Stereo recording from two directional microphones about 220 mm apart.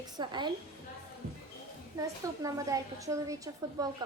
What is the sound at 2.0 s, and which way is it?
A woman's voice, 15° right (ahead or behind).